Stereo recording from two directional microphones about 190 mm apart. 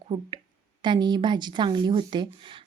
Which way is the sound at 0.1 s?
20° right (ahead or behind).